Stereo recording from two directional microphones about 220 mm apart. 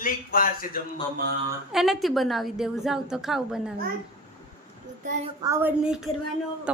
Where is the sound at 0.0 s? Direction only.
40° left (ahead or behind).